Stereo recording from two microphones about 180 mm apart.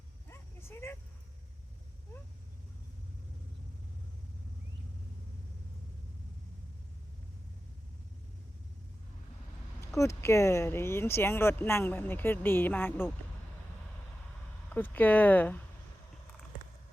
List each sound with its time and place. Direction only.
0.3 s vehicle: 15° left (ahead or behind)
10.0 s speech: 15° left (ahead or behind)
14.7 s speech: 10° left (ahead or behind)